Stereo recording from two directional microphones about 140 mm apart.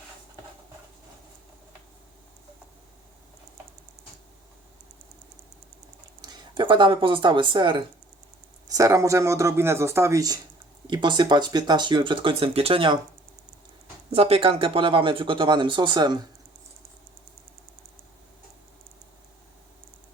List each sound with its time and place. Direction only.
6.2 s speech: 30° right (ahead or behind)
8.6 s speech: 25° right (ahead or behind)
14.1 s speech: 45° right (ahead or behind)